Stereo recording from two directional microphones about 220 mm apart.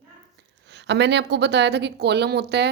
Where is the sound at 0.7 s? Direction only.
50° right (ahead or behind).